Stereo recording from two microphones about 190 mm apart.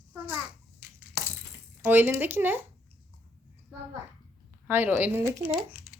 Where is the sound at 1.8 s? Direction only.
10° right (ahead or behind).